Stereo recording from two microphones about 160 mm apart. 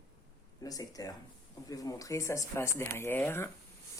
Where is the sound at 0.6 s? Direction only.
20° left (ahead or behind).